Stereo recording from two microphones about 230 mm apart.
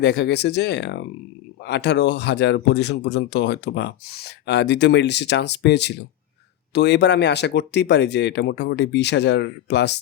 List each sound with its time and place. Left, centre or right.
0.0 s speech: left